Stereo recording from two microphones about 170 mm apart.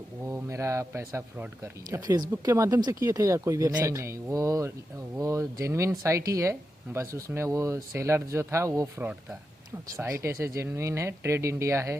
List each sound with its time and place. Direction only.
0.3 s speech: 15° right (ahead or behind)